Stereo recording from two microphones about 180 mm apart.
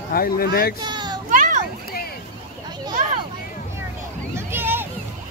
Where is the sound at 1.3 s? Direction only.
45° right (ahead or behind).